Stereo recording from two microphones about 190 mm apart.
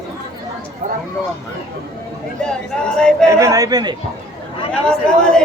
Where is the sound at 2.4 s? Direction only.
5° left (ahead or behind).